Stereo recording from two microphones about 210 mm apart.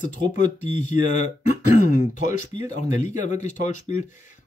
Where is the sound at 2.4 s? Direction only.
35° left (ahead or behind).